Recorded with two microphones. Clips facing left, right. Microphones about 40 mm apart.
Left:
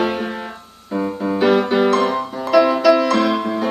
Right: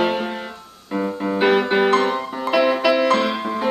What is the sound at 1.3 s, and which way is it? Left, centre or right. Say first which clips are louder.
Music: left 1 dB; right.